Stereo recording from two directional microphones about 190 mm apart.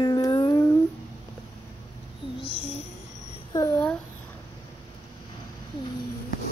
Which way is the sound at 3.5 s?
15° left (ahead or behind).